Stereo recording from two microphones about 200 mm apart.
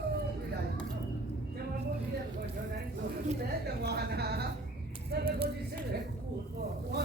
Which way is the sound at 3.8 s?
55° right (ahead or behind).